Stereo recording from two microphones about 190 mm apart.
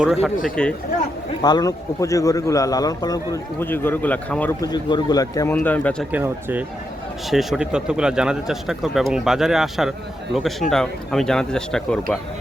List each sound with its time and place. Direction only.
0.0 s a man's voice: centre (ahead or behind)
1.4 s a man's voice: 20° left (ahead or behind)
4.6 s a man's voice: 20° left (ahead or behind)
5.5 s speech: 10° left (ahead or behind)
6.1 s a man's voice: 10° right (ahead or behind)